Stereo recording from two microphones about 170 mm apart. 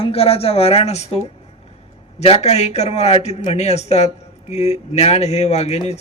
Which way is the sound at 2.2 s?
40° left (ahead or behind).